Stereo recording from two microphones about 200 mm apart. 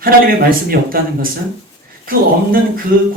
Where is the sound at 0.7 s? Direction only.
45° right (ahead or behind).